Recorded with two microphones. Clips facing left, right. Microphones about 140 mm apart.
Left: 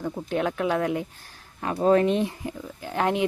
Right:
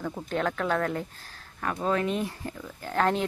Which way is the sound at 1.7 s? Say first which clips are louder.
Left 8 dB; 35° left (ahead or behind).